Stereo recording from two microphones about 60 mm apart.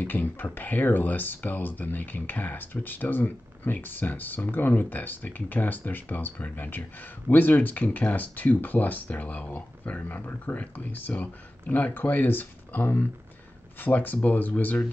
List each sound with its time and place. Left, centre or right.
0.0 s speech: left